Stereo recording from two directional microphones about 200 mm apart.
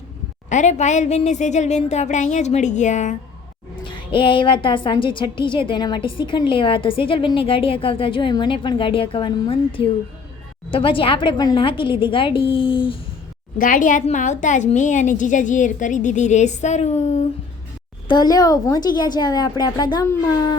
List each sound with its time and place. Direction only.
0.5 s a woman's voice: 35° left (ahead or behind)
3.8 s a woman's voice: 25° left (ahead or behind)
13.6 s a woman's voice: 40° left (ahead or behind)
18.1 s a woman's voice: 20° left (ahead or behind)